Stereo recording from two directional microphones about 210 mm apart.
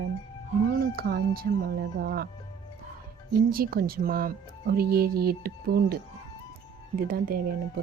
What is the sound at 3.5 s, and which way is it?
Speech, 45° right (ahead or behind).